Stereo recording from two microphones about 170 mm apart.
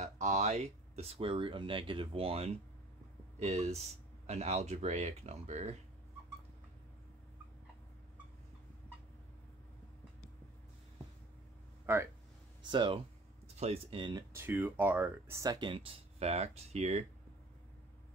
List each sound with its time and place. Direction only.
0.0 s speech: 45° right (ahead or behind)
11.8 s a sound: 15° right (ahead or behind)
12.6 s speech: 30° right (ahead or behind)
14.3 s speech: 15° right (ahead or behind); by 17.0 s 40° right (ahead or behind)